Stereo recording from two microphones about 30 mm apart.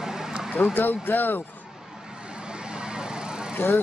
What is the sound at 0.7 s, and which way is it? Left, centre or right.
Speech, left.